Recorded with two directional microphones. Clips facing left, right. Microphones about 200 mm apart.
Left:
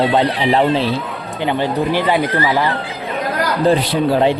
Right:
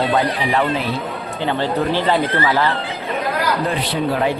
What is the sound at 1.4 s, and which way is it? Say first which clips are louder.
Speech: left 2 dB; 15° left (ahead or behind).